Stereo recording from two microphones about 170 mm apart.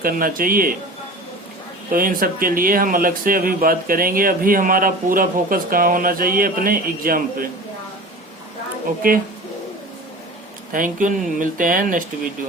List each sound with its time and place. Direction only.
0.0 s speech: 55° right (ahead or behind)
1.9 s speech: 55° right (ahead or behind)
10.7 s speech: 50° right (ahead or behind)